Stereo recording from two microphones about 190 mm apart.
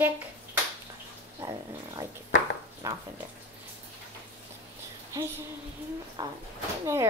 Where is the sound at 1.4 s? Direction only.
15° right (ahead or behind).